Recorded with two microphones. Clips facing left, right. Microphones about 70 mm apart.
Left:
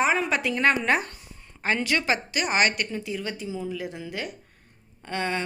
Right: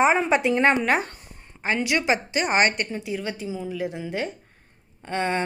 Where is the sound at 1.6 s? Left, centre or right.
Centre; by 2.8 s right.